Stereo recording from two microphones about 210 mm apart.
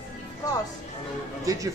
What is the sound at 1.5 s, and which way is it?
Speech, 15° right (ahead or behind).